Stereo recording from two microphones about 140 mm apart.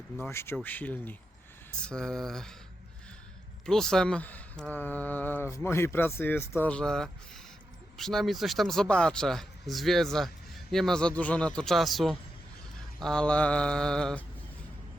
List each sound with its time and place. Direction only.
0.2 s speech: 20° left (ahead or behind)
3.7 s speech: 5° left (ahead or behind)